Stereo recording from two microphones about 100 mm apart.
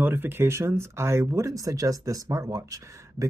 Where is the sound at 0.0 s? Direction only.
20° right (ahead or behind).